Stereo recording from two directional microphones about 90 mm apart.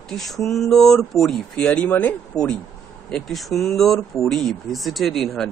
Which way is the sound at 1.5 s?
15° left (ahead or behind).